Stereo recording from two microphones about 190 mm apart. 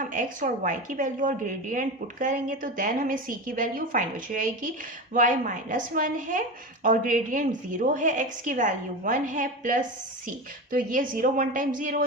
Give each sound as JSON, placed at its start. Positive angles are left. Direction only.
{"t": 0.0, "sound": "a woman's voice", "side_deg": -45}